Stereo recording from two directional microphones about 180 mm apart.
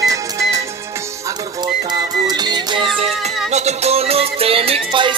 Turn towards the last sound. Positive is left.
turn(degrees=-30)  # may be behind; listen again after turning